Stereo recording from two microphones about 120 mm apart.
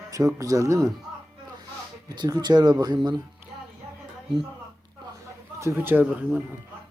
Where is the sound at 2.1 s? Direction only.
35° right (ahead or behind).